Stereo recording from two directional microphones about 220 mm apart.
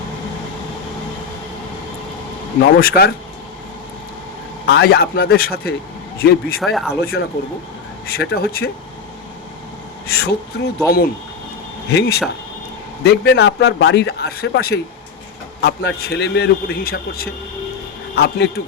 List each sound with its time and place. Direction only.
2.7 s a man's voice: 45° left (ahead or behind)
4.6 s a man's voice: 45° left (ahead or behind)
6.6 s speech: centre (ahead or behind)
7.0 s a man's voice: 45° left (ahead or behind)
10.2 s a man's voice: 45° left (ahead or behind)
18.2 s a man's voice: 50° left (ahead or behind)